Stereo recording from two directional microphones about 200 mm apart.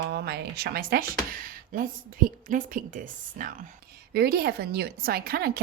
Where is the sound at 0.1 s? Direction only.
55° right (ahead or behind).